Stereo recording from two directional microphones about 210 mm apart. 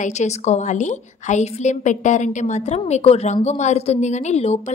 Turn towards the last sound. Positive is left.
turn(degrees=30)  # may be behind; listen again after turning